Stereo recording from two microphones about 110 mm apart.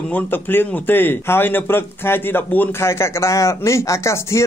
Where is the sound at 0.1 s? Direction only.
20° left (ahead or behind).